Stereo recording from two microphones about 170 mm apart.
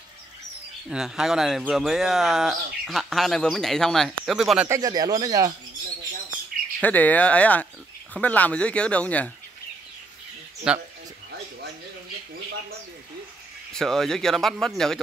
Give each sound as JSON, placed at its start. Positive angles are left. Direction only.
{"t": 0.8, "sound": "speech", "side_deg": -5}
{"t": 4.6, "sound": "speech", "side_deg": -20}
{"t": 6.8, "sound": "speech", "side_deg": 10}
{"t": 10.7, "sound": "speech", "side_deg": -5}
{"t": 13.7, "sound": "speech", "side_deg": 0}